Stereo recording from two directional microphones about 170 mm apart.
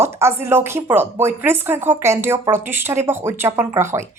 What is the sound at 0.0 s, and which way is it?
Speech, 15° right (ahead or behind).